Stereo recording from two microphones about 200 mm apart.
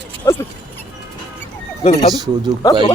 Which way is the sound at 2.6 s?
25° left (ahead or behind).